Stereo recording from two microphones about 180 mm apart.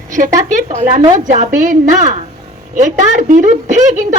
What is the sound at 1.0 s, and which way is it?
Speech, 25° right (ahead or behind).